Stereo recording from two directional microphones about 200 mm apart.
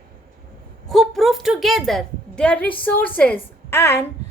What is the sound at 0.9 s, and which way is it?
A woman's voice, centre (ahead or behind).